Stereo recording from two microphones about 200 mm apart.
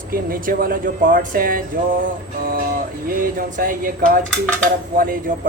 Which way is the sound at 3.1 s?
45° right (ahead or behind).